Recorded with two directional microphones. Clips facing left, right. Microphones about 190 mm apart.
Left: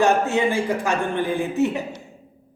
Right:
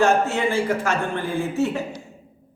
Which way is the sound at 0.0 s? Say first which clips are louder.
Left 1 dB; 15° left (ahead or behind).